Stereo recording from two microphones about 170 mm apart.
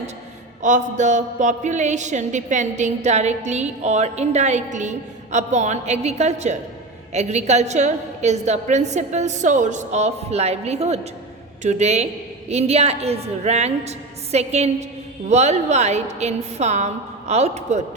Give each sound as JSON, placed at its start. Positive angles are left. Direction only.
{"t": 0.6, "sound": "a woman's voice", "side_deg": -45}